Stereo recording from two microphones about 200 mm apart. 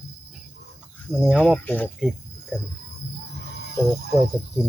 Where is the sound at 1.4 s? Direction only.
10° left (ahead or behind).